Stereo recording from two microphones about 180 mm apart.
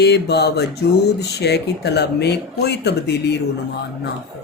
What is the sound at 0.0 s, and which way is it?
Speech, 65° left (ahead or behind).